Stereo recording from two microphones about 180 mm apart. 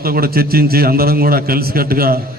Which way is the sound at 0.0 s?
55° right (ahead or behind).